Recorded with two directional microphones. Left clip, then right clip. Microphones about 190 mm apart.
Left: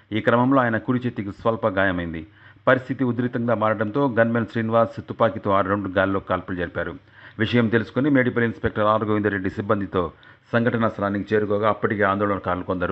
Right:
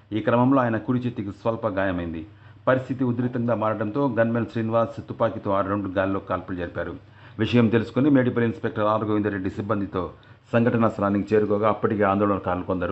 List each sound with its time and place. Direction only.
0.1 s speech: 25° left (ahead or behind)